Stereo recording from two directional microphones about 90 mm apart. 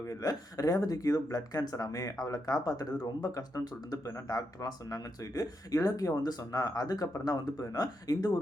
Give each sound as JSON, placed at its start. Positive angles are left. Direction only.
{"t": 0.0, "sound": "speech", "side_deg": 40}